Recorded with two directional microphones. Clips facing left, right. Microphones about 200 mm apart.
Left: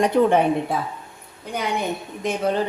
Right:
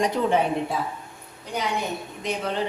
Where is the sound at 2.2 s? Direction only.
45° left (ahead or behind).